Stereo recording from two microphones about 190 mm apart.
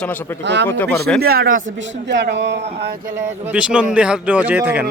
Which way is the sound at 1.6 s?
70° right (ahead or behind).